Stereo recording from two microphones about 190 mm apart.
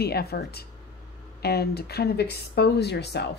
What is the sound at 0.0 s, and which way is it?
Speech, 55° left (ahead or behind).